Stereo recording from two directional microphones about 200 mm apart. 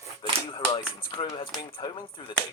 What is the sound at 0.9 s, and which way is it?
Speech, 25° left (ahead or behind).